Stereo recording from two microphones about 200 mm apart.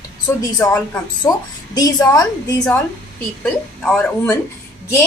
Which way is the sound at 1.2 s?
15° left (ahead or behind).